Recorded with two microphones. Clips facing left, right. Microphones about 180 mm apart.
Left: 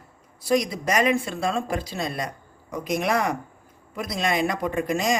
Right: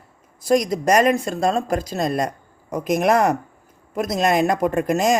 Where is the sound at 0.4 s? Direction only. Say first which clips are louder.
Right 5 dB; 45° right (ahead or behind).